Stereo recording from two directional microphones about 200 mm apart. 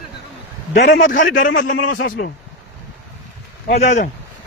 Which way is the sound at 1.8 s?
70° left (ahead or behind).